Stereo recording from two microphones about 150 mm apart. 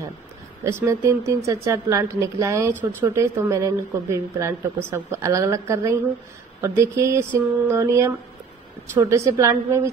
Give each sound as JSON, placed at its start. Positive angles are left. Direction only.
{"t": 0.7, "sound": "a woman's voice", "side_deg": -20}